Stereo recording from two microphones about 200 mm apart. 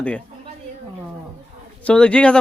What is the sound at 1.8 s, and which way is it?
Speech, 5° left (ahead or behind).